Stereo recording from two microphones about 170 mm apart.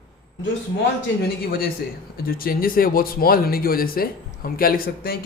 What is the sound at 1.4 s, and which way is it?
Speech, 60° left (ahead or behind).